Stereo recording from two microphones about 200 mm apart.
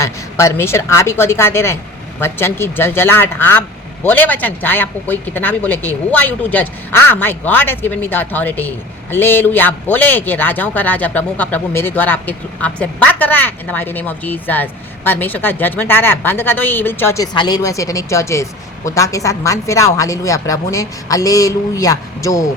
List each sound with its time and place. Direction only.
0.0 s speech: 15° left (ahead or behind)